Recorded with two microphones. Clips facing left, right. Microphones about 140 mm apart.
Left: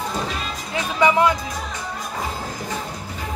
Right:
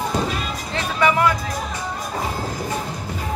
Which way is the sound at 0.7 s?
20° left (ahead or behind).